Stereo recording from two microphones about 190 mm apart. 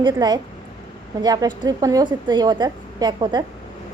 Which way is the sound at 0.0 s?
20° right (ahead or behind).